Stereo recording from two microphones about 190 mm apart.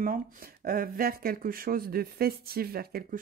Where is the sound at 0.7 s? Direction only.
50° right (ahead or behind).